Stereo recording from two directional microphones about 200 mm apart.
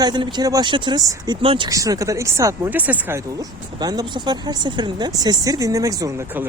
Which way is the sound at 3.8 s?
20° right (ahead or behind).